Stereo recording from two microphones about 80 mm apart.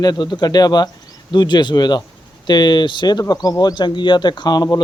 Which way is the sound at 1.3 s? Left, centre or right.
Left.